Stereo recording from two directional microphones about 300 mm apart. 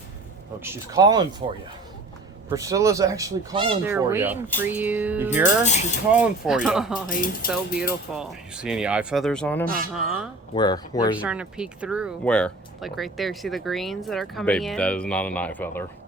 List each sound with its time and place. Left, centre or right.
0.6 s speech: centre
2.5 s speech: centre
5.4 s speech: left
6.1 s speech: centre
7.1 s speech: left
8.1 s speech: centre
9.6 s speech: right
9.9 s speech: centre
10.5 s speech: centre
11.2 s speech: centre